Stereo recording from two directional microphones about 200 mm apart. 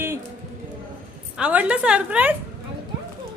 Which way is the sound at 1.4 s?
5° right (ahead or behind).